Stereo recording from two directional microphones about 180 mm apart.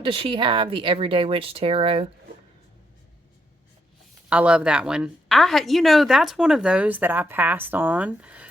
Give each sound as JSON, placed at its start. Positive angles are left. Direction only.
{"t": 0.0, "sound": "speech", "side_deg": -30}
{"t": 4.3, "sound": "a woman's voice", "side_deg": -5}